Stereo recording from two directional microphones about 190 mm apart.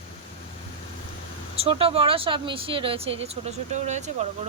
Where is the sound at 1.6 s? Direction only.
30° right (ahead or behind).